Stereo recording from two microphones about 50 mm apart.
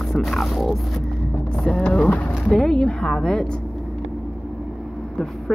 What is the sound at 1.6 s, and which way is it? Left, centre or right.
Speech, left.